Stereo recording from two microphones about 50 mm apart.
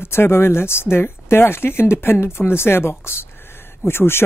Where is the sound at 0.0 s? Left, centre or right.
Left.